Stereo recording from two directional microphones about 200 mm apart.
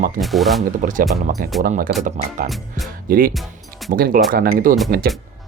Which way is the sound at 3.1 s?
45° right (ahead or behind).